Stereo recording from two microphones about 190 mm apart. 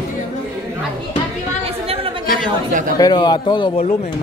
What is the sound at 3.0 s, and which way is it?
Speech, 20° left (ahead or behind).